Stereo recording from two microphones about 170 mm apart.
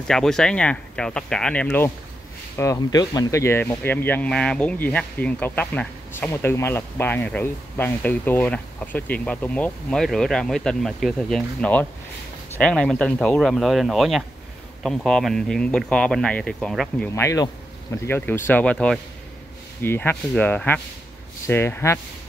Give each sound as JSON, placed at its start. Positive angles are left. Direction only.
{"t": 0.1, "sound": "speech", "side_deg": 5}
{"t": 17.1, "sound": "speech", "side_deg": 20}